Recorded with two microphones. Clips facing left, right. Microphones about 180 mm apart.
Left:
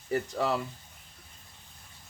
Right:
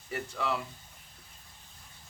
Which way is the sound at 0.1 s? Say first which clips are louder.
Left 5 dB; 35° left (ahead or behind).